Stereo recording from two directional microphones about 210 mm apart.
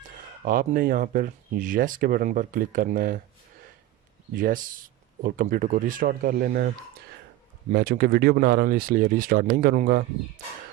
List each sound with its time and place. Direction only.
0.4 s speech: 40° right (ahead or behind)
4.4 s speech: 40° right (ahead or behind)
7.7 s speech: 45° right (ahead or behind)